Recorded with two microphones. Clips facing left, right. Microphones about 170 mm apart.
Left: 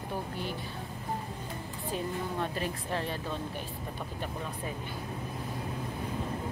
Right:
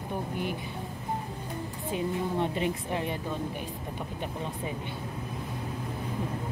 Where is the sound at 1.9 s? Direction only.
20° right (ahead or behind).